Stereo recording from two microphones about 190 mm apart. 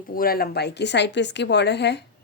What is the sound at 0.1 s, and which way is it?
Speech, 50° left (ahead or behind).